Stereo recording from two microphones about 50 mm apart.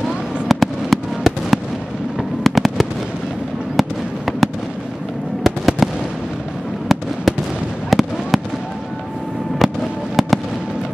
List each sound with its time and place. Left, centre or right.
0.0 s fireworks: centre
5.4 s fireworks: centre
7.3 s fireworks: centre
9.6 s fireworks: centre